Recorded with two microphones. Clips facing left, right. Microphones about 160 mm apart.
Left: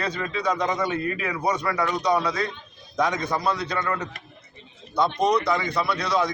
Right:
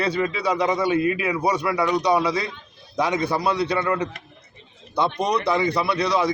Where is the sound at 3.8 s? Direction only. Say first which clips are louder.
Right 5 dB; 15° right (ahead or behind).